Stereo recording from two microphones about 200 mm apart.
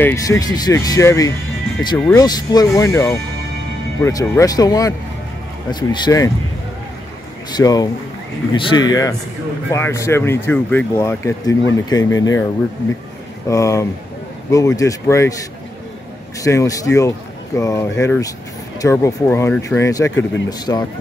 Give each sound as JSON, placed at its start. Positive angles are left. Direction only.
{"t": 0.0, "sound": "speech", "side_deg": 15}
{"t": 2.2, "sound": "speech", "side_deg": 20}
{"t": 7.5, "sound": "speech", "side_deg": 20}
{"t": 13.5, "sound": "speech", "side_deg": 15}
{"t": 16.4, "sound": "speech", "side_deg": 15}